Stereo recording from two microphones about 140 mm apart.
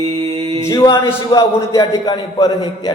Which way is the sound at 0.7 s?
25° left (ahead or behind).